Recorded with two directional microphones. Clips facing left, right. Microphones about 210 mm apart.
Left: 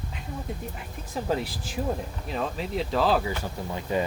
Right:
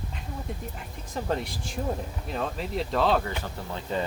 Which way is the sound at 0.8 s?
5° left (ahead or behind).